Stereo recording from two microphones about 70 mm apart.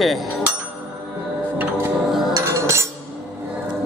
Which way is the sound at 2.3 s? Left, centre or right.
Right.